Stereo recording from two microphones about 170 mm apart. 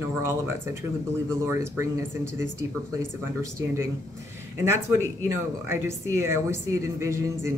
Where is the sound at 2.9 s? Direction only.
15° right (ahead or behind).